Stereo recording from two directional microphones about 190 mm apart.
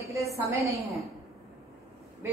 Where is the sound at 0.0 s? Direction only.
15° right (ahead or behind).